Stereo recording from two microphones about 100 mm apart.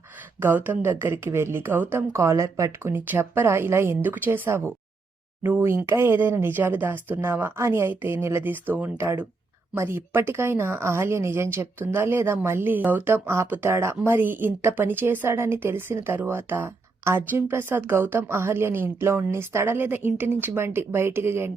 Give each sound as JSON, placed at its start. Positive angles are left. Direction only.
{"t": 0.3, "sound": "a woman's voice", "side_deg": -20}